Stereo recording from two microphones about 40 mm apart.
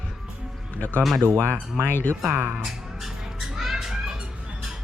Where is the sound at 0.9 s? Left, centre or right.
Left.